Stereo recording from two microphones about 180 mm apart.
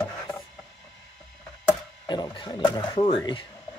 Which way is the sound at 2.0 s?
25° left (ahead or behind).